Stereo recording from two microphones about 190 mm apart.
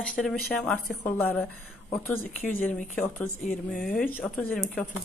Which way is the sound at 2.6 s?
40° left (ahead or behind).